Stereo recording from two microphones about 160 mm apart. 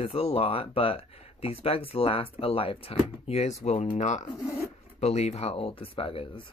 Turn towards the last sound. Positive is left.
turn(degrees=35)  # may be behind; listen again after turning